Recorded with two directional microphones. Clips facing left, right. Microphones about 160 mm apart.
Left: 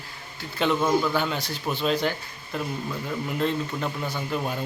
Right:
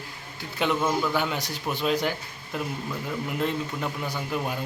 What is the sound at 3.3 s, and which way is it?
A man's voice, 15° right (ahead or behind).